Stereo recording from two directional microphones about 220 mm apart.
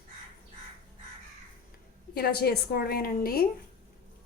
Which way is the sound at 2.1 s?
45° left (ahead or behind).